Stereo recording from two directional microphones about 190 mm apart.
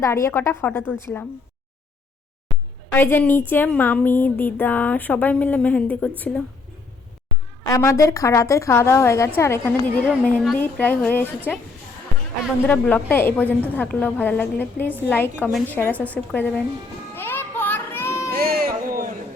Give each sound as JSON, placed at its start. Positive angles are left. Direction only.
{"t": 0.0, "sound": "a woman's voice", "side_deg": 15}
{"t": 2.9, "sound": "a woman's voice", "side_deg": 10}
{"t": 7.6, "sound": "a woman's voice", "side_deg": 15}
{"t": 12.6, "sound": "a woman's voice", "side_deg": 10}
{"t": 17.2, "sound": "a sound", "side_deg": 10}
{"t": 18.3, "sound": "a sound", "side_deg": -50}